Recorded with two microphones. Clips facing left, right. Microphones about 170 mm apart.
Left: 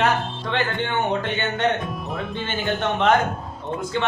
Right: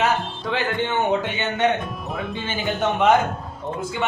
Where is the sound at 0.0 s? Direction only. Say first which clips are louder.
Even; 5° right (ahead or behind).